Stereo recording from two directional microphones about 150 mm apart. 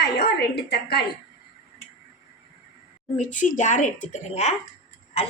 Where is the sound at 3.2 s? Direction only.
60° left (ahead or behind).